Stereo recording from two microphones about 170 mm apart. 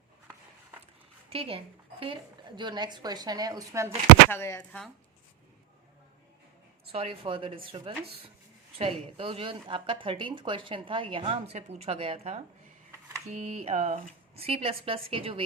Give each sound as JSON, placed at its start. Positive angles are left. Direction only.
{"t": 1.3, "sound": "speech", "side_deg": -35}
{"t": 4.3, "sound": "speech", "side_deg": 15}
{"t": 6.9, "sound": "a woman's voice", "side_deg": -35}